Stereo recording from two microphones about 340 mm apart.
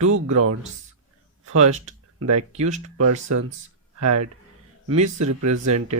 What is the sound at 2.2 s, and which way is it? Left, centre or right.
Speech, right.